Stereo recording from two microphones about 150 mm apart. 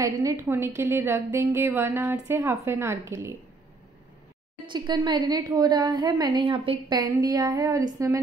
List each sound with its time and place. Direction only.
0.0 s a woman's voice: 20° right (ahead or behind)
4.6 s a woman's voice: 30° right (ahead or behind)